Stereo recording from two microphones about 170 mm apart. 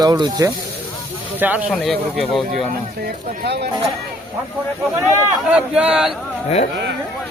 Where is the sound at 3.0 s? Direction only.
75° right (ahead or behind).